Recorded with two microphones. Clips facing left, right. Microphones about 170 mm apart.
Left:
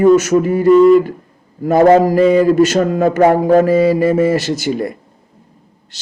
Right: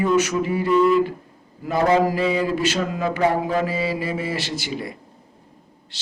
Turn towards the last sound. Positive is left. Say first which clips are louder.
# left 1 dB
turn(degrees=45)  # may be behind; listen again after turning